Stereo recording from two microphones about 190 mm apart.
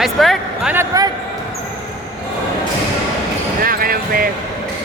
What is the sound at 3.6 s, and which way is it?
Basketball bounce, 50° right (ahead or behind).